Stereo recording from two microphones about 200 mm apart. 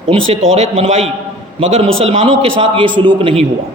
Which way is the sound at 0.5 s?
35° right (ahead or behind).